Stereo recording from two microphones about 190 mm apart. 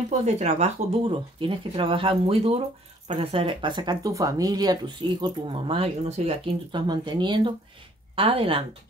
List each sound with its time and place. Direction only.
0.2 s speech: 35° right (ahead or behind)